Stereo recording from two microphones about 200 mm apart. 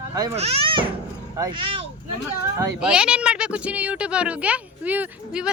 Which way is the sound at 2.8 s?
5° right (ahead or behind).